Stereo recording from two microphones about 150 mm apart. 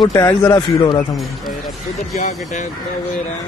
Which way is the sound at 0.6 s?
30° left (ahead or behind).